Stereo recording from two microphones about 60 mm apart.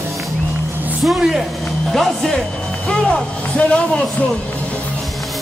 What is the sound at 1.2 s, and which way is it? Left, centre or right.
Speech, centre.